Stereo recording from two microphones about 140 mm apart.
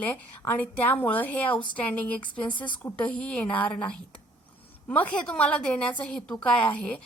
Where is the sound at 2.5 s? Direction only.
35° left (ahead or behind).